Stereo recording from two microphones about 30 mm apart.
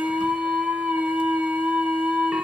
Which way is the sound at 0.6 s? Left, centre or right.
Right.